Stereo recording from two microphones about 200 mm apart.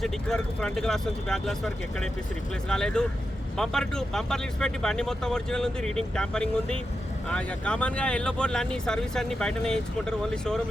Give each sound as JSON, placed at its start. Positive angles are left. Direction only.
{"t": 0.0, "sound": "speech", "side_deg": 5}